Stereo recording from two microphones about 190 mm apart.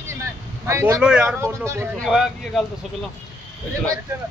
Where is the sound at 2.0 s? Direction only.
Centre (ahead or behind).